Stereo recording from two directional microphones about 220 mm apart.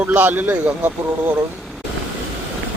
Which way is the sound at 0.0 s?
10° right (ahead or behind).